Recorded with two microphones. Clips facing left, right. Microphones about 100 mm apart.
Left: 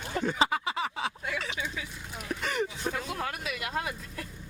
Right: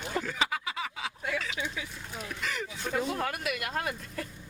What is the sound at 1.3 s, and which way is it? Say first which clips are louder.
Speech: right 1 dB; 30° left (ahead or behind).